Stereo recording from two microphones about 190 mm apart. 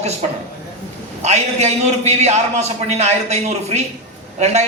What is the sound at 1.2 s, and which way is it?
A man's voice, 35° right (ahead or behind).